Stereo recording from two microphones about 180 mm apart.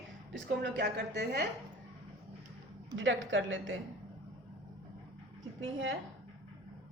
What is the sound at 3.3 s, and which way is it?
Speech, 90° right.